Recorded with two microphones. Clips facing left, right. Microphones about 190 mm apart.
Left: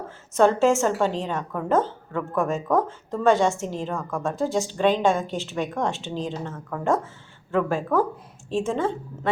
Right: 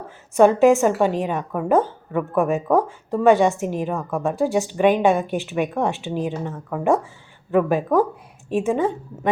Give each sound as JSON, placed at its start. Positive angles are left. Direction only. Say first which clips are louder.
{"t": 0.3, "sound": "a woman's voice", "louder": "right 5 dB", "side_deg": -15}